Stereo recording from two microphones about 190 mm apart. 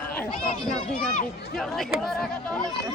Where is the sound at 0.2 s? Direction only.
5° left (ahead or behind).